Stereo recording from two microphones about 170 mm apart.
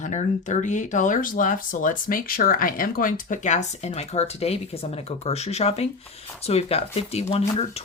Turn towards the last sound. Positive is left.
turn(degrees=35)  # may be behind; listen again after turning